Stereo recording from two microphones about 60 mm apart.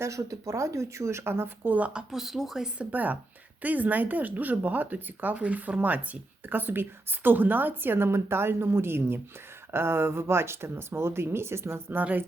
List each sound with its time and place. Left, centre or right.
0.0 s speech: right
1.8 s speech: centre
2.7 s a woman's voice: right
11.9 s a woman's voice: right